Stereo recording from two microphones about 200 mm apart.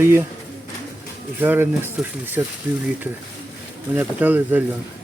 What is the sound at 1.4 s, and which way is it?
Speech, 10° right (ahead or behind).